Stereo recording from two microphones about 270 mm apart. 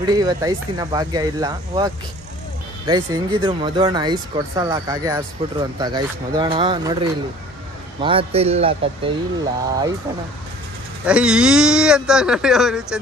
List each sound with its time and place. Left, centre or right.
0.0 s speech: centre
2.9 s speech: centre
11.1 s speech: centre